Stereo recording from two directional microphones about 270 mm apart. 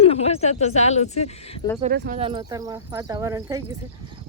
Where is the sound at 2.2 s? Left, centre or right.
Centre.